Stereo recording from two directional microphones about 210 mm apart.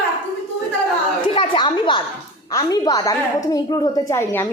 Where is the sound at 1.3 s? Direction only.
25° left (ahead or behind).